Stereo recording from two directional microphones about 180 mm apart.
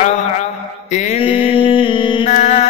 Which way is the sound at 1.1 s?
30° left (ahead or behind).